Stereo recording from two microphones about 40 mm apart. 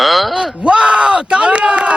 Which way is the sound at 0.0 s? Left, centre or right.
Centre.